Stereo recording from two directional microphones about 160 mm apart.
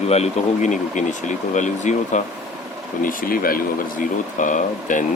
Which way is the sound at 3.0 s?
60° left (ahead or behind).